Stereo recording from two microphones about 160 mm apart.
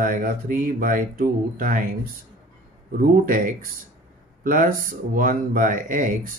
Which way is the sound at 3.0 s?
60° right (ahead or behind).